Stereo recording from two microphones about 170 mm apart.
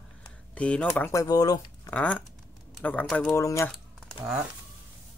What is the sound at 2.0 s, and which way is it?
Speech, 10° left (ahead or behind).